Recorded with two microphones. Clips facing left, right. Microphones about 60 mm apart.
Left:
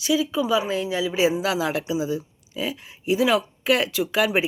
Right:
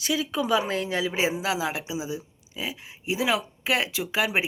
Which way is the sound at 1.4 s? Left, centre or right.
Centre.